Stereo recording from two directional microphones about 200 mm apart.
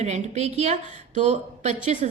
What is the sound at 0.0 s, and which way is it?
A woman's voice, 35° right (ahead or behind).